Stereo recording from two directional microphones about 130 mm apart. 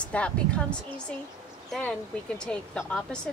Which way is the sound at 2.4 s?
5° left (ahead or behind).